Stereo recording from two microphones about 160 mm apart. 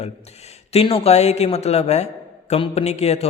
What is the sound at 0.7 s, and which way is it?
A woman's voice, 40° left (ahead or behind).